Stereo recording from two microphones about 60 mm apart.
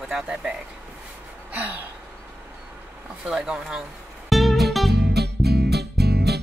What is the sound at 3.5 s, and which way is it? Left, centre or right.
Speech, centre.